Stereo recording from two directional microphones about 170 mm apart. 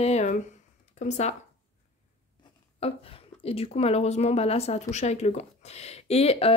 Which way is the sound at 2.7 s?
35° left (ahead or behind).